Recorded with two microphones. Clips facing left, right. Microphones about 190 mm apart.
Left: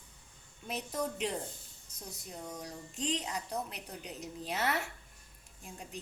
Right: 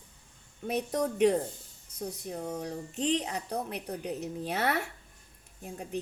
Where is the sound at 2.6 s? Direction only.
60° right (ahead or behind).